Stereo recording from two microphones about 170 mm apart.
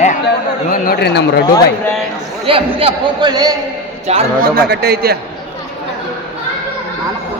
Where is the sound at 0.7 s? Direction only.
65° left (ahead or behind).